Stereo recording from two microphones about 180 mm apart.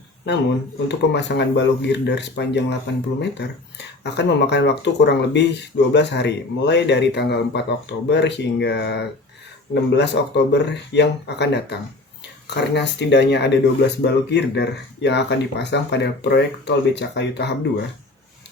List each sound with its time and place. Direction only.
0.9 s speech: 75° left (ahead or behind)